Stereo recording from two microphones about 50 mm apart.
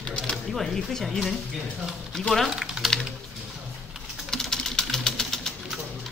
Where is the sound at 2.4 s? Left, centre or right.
Centre.